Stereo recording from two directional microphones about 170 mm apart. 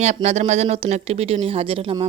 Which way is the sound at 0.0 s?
40° right (ahead or behind).